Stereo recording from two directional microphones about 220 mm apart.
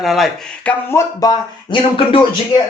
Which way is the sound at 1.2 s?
20° left (ahead or behind).